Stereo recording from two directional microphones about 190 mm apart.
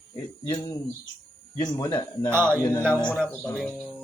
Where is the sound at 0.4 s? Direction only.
10° left (ahead or behind).